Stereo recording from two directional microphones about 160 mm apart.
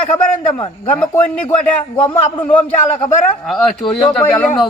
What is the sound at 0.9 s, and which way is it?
Speech, 10° left (ahead or behind).